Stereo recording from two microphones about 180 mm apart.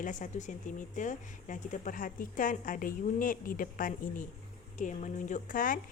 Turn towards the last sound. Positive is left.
turn(degrees=50)  # may be behind; listen again after turning